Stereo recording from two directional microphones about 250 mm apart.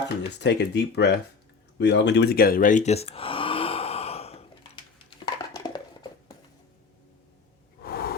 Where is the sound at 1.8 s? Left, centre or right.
Left; by 6.1 s centre.